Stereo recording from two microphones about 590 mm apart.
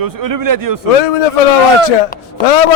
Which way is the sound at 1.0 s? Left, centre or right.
Left.